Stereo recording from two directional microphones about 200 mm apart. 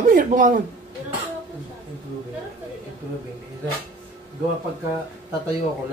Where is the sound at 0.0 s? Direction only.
40° right (ahead or behind).